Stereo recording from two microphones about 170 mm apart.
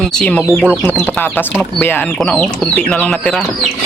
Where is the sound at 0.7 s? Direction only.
5° left (ahead or behind).